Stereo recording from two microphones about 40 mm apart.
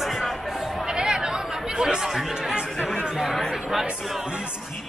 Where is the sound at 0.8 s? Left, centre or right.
Centre.